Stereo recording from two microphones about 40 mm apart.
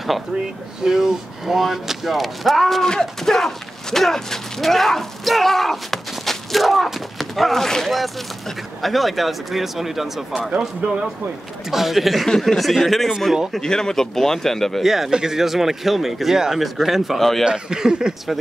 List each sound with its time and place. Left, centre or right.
0.8 s speech: centre
11.7 s speech: centre
14.8 s speech: centre
17.5 s speech: centre